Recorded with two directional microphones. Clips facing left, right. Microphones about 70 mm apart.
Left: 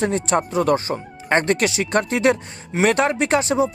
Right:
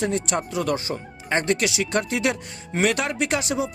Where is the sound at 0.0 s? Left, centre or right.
Left.